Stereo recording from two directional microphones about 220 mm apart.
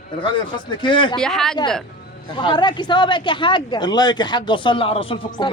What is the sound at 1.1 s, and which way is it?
Speech, centre (ahead or behind).